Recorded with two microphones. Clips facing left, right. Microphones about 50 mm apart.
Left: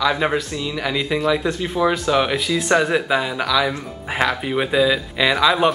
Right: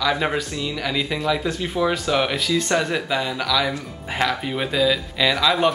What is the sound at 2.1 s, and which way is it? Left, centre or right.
Speech, centre.